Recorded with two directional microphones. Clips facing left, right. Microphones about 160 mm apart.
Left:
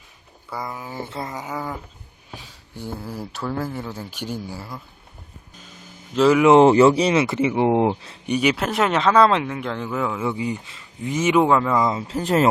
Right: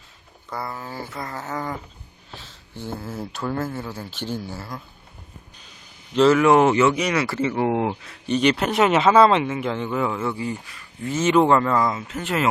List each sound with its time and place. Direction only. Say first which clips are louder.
0.5 s speech: left 1 dB; 15° left (ahead or behind)
2.3 s a sound: left 1 dB; 15° left (ahead or behind)
3.4 s speech: even; 10° left (ahead or behind)
6.1 s speech: left 2 dB; 10° left (ahead or behind); by 8.2 s 25° left (ahead or behind)
8.3 s speech: right 1 dB; 5° left (ahead or behind)
10.2 s speech: left 2 dB; 15° left (ahead or behind)
11.1 s speech: even; 10° left (ahead or behind)
11.8 s speech: left 2 dB; 25° left (ahead or behind)